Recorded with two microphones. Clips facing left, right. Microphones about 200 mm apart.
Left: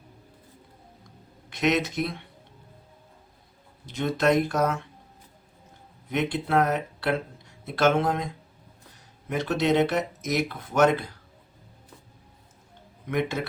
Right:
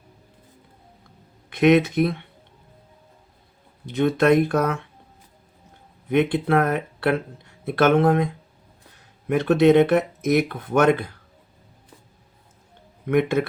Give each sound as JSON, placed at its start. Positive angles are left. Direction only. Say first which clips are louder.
{"t": 1.5, "sound": "speech", "louder": "right 8 dB", "side_deg": -55}
{"t": 3.8, "sound": "speech", "louder": "right 6 dB", "side_deg": -60}
{"t": 6.1, "sound": "speech", "louder": "right 7 dB", "side_deg": -55}
{"t": 9.3, "sound": "speech", "louder": "right 8 dB", "side_deg": -55}
{"t": 13.1, "sound": "speech", "louder": "right 7 dB", "side_deg": -55}